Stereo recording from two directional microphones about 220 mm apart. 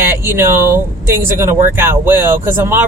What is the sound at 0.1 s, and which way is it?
Speech, 10° right (ahead or behind).